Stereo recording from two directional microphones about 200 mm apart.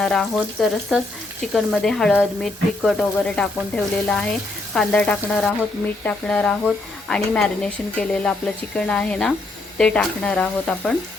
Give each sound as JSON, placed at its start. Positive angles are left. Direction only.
{"t": 0.0, "sound": "speech", "side_deg": 0}